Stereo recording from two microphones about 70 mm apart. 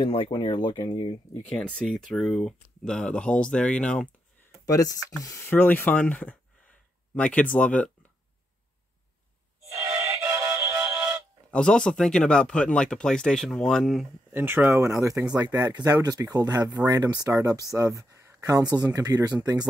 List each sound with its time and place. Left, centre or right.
0.6 s speech: left
1.5 s speech: centre
1.9 s speech: centre
4.5 s speech: left
5.5 s speech: left
9.8 s music: right
11.5 s speech: centre
14.3 s speech: right
14.8 s speech: right
15.2 s speech: right